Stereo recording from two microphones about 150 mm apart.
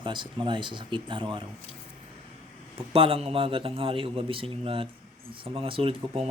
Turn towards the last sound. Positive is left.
turn(degrees=-35)  # may be behind; listen again after turning